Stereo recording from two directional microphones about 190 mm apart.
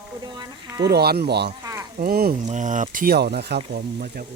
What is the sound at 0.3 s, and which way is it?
Speech, 20° right (ahead or behind).